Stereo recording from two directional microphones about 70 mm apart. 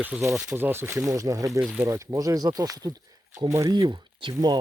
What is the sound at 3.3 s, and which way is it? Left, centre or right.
Speech, right.